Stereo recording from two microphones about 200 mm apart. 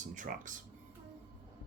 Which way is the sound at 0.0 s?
40° right (ahead or behind).